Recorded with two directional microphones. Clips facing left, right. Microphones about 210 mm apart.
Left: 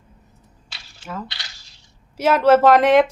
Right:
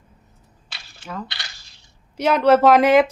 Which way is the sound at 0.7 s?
55° right (ahead or behind).